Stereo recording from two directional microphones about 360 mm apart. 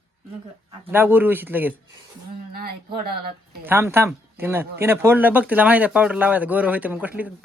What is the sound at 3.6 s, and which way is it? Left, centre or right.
Speech, centre.